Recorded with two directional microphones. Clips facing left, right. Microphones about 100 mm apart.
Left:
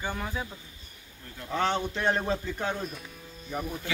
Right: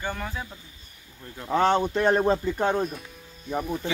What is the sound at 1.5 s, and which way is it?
A man's voice, 45° right (ahead or behind).